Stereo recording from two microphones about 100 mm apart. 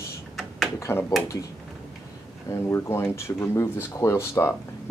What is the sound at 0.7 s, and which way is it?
Speech, 30° left (ahead or behind).